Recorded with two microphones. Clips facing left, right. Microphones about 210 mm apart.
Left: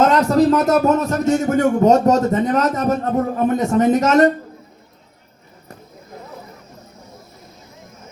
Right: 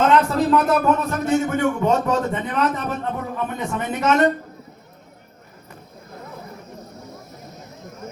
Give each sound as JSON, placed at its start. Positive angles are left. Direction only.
{"t": 0.0, "sound": "speech", "side_deg": 40}